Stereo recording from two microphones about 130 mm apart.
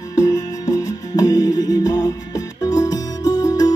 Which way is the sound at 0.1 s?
30° left (ahead or behind).